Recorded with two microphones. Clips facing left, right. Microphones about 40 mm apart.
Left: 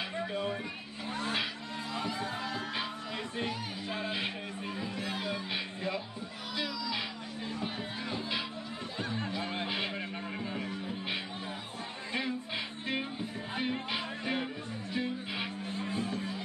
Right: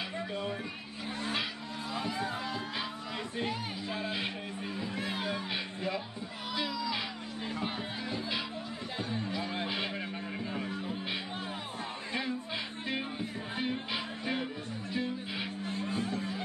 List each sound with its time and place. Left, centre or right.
0.1 s a sound: centre
2.3 s music: centre
3.9 s speech: centre
5.0 s music: right
5.5 s music: centre
9.6 s a sound: centre
10.5 s music: centre